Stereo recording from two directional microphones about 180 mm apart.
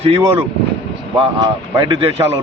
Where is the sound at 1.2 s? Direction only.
25° right (ahead or behind).